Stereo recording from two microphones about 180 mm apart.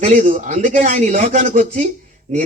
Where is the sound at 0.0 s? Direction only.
45° right (ahead or behind).